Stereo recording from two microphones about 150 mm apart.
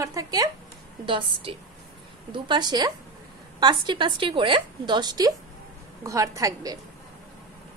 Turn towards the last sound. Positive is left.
turn(degrees=-25)  # may be behind; listen again after turning